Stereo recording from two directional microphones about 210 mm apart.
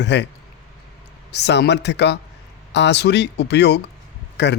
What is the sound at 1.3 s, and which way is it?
Speech, 55° left (ahead or behind).